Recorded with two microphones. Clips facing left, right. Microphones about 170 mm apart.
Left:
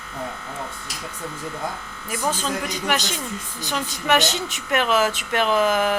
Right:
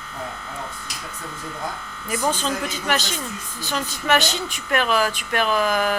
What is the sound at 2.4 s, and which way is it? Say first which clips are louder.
Speech: even; 15° left (ahead or behind).